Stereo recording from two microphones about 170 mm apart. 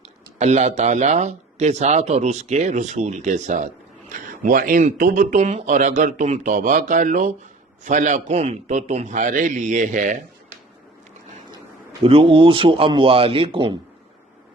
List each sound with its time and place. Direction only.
0.0 s speech: 40° right (ahead or behind)
12.0 s speech: 30° right (ahead or behind)